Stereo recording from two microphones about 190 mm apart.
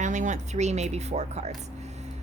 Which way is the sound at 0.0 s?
40° right (ahead or behind).